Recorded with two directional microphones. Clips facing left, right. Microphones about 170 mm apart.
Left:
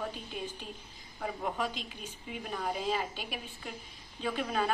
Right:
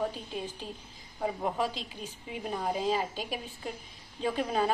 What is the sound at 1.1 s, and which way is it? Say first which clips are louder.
A woman's voice: right 4 dB; 25° right (ahead or behind).